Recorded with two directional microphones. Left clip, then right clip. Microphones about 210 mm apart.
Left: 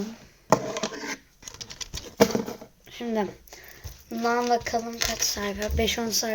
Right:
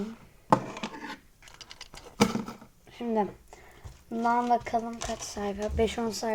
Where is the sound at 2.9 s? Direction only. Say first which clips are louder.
Left 1 dB; centre (ahead or behind).